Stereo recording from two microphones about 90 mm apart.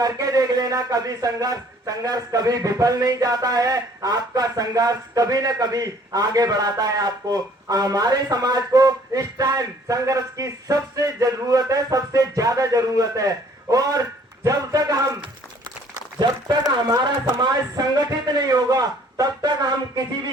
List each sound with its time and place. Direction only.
0.0 s a man's voice: 45° right (ahead or behind)
16.0 s a man's voice: 45° right (ahead or behind)